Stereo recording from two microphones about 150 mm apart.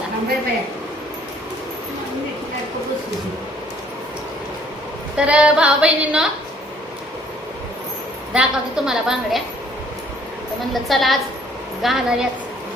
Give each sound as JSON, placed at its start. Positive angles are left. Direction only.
{"t": 5.1, "sound": "female singing", "side_deg": -5}
{"t": 8.3, "sound": "a woman's voice", "side_deg": -5}
{"t": 10.8, "sound": "a woman's voice", "side_deg": 0}